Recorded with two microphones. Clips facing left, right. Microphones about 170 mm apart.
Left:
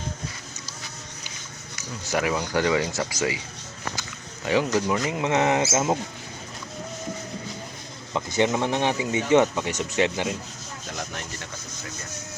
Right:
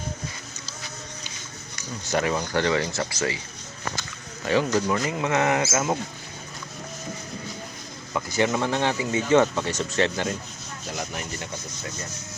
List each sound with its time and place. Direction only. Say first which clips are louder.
1.8 s speech: right 1 dB; 5° left (ahead or behind)
4.4 s speech: even; 15° left (ahead or behind)
8.1 s speech: left 1 dB; 20° left (ahead or behind)
10.8 s speech: right 2 dB; 5° right (ahead or behind)